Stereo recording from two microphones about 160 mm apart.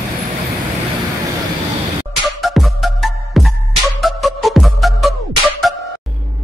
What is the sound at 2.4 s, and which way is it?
Music, centre (ahead or behind).